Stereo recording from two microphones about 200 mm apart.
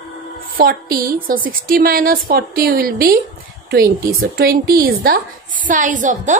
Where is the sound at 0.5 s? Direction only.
45° right (ahead or behind).